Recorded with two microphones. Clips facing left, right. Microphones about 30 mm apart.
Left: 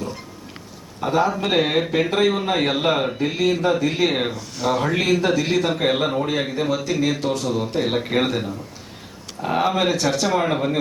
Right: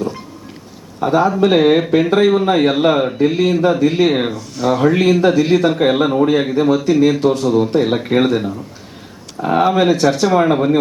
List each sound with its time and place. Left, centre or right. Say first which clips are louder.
1.0 s speech: right 7 dB; centre